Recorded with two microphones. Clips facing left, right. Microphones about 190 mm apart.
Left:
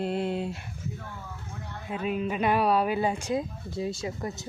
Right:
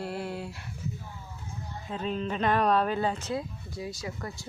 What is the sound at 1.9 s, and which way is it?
Speech, 10° left (ahead or behind).